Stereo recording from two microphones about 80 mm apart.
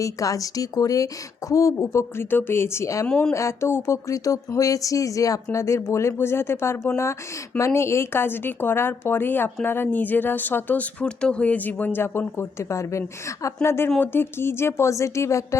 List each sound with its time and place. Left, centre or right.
0.0 s speech: left
3.1 s speech: centre
3.3 s speech: left